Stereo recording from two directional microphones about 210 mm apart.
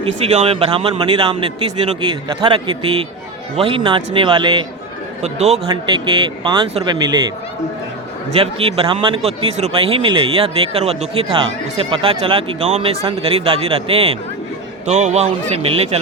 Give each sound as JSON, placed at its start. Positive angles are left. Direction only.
{"t": 0.0, "sound": "speech", "side_deg": -30}
{"t": 8.3, "sound": "a man's voice", "side_deg": -25}